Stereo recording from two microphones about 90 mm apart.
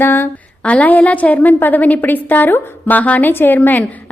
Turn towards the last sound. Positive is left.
turn(degrees=20)  # may be behind; listen again after turning